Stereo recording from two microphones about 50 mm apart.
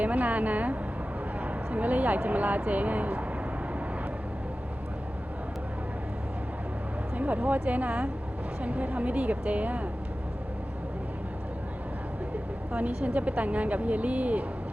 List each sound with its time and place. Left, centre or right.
0.0 s speech: right
7.2 s speech: right
13.1 s speech: right